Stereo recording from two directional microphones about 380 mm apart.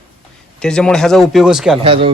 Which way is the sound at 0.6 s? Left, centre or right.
Centre.